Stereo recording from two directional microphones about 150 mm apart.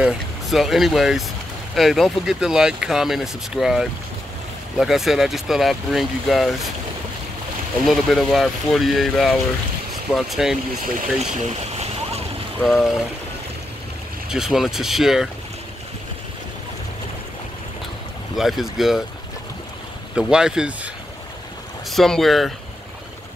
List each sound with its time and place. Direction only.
0.0 s speech: centre (ahead or behind)
7.8 s speech: centre (ahead or behind)
11.0 s a sound: 50° right (ahead or behind)
12.6 s speech: centre (ahead or behind)
14.3 s speech: 5° right (ahead or behind)
18.3 s speech: centre (ahead or behind)
20.2 s speech: 5° right (ahead or behind)